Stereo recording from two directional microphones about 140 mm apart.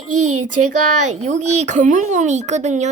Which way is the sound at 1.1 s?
55° right (ahead or behind).